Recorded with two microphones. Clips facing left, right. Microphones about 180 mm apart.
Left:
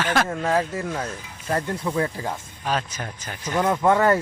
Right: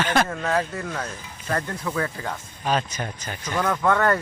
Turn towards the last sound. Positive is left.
turn(degrees=20)  # may be behind; listen again after turning